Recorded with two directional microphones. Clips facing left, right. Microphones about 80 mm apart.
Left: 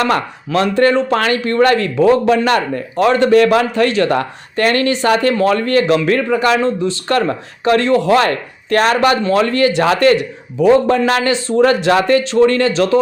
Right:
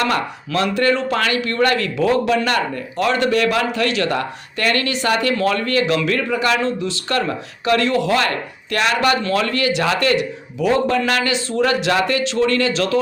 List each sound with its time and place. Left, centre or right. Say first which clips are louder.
0.1 s speech: left 4 dB; left